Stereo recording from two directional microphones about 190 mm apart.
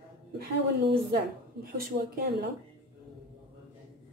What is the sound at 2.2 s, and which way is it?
Speech, 60° right (ahead or behind).